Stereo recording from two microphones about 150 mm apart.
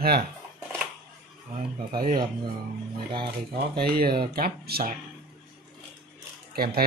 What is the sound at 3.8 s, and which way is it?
Speech, 80° right.